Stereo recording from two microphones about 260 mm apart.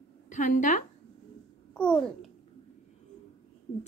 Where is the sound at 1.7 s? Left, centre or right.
Centre.